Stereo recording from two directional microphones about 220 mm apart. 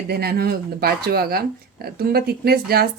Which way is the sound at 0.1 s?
45° right (ahead or behind).